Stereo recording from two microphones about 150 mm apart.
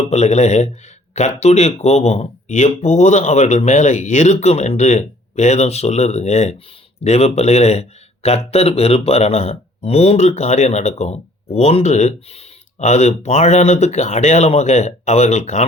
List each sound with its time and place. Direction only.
0.0 s speech: 50° left (ahead or behind)